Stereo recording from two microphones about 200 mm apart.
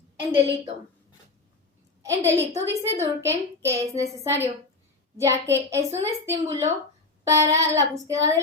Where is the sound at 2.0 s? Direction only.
15° right (ahead or behind).